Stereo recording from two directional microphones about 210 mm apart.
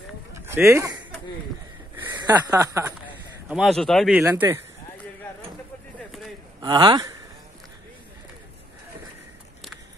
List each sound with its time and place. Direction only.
0.7 s speech: 15° right (ahead or behind)
2.0 s speech: 15° right (ahead or behind)
3.4 s speech: centre (ahead or behind)
4.2 s speech: 10° right (ahead or behind)
6.6 s speech: 20° right (ahead or behind)